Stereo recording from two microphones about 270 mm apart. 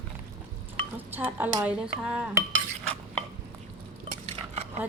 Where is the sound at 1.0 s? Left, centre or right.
Centre.